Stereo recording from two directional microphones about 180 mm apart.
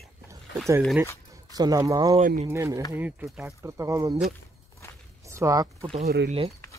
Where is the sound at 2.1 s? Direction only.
40° right (ahead or behind).